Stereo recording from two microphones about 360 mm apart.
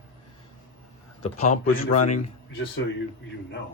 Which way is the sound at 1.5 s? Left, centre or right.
Left.